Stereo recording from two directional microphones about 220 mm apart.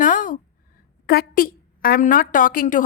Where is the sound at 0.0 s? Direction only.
35° left (ahead or behind).